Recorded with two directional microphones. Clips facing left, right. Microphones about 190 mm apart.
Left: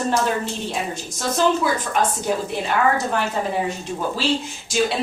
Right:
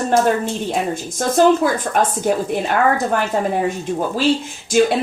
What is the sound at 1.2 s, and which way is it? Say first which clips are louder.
Speech: right 6 dB; 50° right (ahead or behind).